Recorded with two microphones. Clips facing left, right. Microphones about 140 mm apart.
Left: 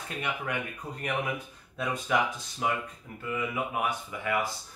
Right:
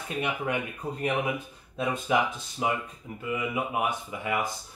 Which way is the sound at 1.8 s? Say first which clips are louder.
Right 2 dB; 20° right (ahead or behind).